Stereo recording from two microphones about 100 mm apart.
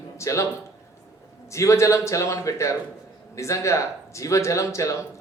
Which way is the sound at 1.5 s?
30° left (ahead or behind).